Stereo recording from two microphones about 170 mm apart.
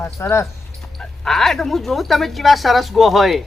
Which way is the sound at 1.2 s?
Centre (ahead or behind).